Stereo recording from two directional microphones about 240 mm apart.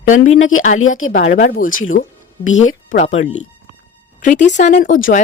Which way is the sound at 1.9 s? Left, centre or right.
Left.